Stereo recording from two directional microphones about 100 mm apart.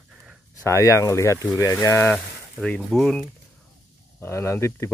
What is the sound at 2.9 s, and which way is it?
Speech, centre (ahead or behind).